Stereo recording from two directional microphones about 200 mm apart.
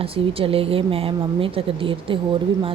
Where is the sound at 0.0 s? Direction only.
30° right (ahead or behind).